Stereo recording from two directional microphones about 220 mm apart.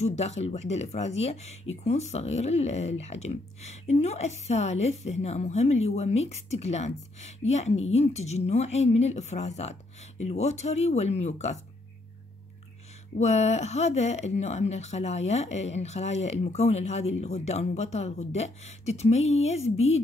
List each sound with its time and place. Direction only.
0.0 s speech: 30° left (ahead or behind)
13.2 s speech: 30° left (ahead or behind)